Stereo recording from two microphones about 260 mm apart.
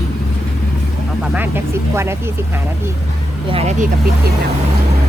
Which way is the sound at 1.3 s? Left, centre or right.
Centre.